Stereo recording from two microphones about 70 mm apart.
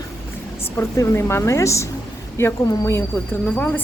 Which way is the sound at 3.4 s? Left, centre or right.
Left.